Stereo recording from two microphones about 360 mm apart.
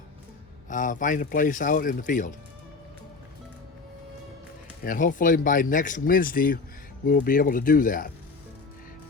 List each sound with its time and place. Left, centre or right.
0.7 s speech: left
4.8 s speech: left